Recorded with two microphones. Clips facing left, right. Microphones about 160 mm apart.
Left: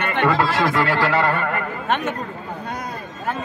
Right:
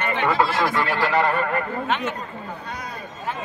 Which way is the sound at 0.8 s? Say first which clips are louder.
Left 1 dB; 70° left (ahead or behind).